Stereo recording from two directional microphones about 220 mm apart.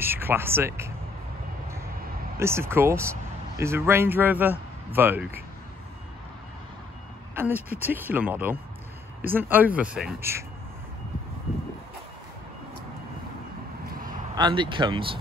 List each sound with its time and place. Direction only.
0.0 s speech: 10° right (ahead or behind)
2.3 s speech: 10° right (ahead or behind)
7.3 s speech: 10° right (ahead or behind)
14.3 s speech: 20° right (ahead or behind)